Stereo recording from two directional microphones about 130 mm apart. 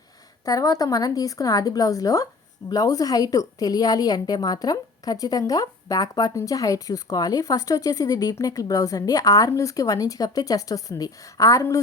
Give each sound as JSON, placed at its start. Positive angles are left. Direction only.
{"t": 0.4, "sound": "a woman's voice", "side_deg": 30}